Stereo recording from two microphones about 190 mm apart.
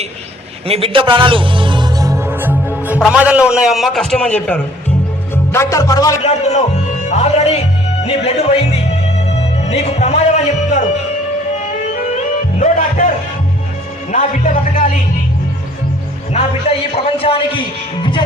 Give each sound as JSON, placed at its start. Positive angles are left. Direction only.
{"t": 0.7, "sound": "speech", "side_deg": -30}
{"t": 5.3, "sound": "music", "side_deg": 15}
{"t": 6.2, "sound": "speech", "side_deg": 35}
{"t": 8.0, "sound": "music", "side_deg": 35}
{"t": 12.5, "sound": "music", "side_deg": 40}
{"t": 14.1, "sound": "music", "side_deg": 40}
{"t": 16.3, "sound": "a man's voice", "side_deg": 30}